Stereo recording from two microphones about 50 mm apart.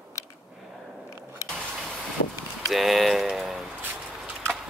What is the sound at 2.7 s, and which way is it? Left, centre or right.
Speech, centre.